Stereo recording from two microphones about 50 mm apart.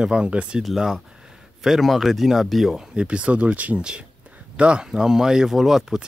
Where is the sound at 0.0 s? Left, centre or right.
Centre.